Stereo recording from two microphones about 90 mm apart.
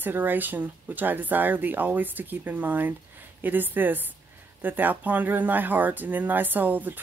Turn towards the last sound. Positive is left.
turn(degrees=-20)  # may be behind; listen again after turning